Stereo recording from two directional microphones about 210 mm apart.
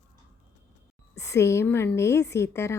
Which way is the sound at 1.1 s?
15° left (ahead or behind).